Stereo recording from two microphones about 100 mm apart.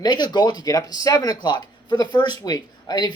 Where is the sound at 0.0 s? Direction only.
45° left (ahead or behind).